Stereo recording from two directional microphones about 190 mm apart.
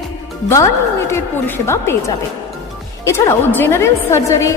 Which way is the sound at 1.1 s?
15° left (ahead or behind).